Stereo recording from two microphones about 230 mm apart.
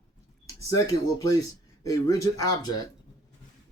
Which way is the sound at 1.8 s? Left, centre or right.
Centre.